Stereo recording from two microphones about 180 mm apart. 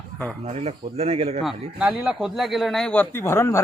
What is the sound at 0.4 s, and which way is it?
Speech, 35° right (ahead or behind).